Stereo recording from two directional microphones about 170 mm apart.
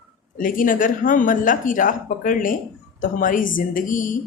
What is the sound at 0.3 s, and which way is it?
A woman's voice, 50° left (ahead or behind).